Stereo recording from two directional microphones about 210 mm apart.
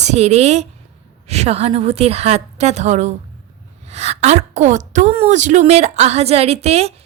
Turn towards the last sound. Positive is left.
turn(degrees=-30)  # may be behind; listen again after turning